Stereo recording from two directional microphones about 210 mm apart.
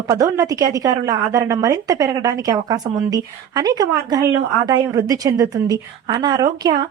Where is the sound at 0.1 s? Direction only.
15° right (ahead or behind).